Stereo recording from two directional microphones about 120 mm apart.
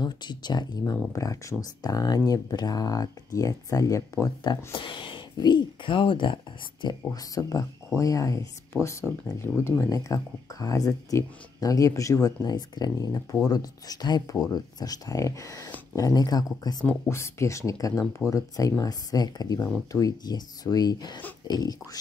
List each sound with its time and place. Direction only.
0.0 s speech: 35° left (ahead or behind)
4.7 s speech: 45° left (ahead or behind)